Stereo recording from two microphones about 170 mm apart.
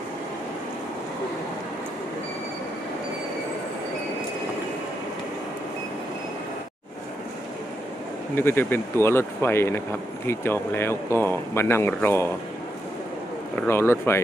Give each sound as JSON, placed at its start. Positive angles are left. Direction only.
{"t": 8.4, "sound": "speech", "side_deg": 15}
{"t": 13.6, "sound": "speech", "side_deg": 15}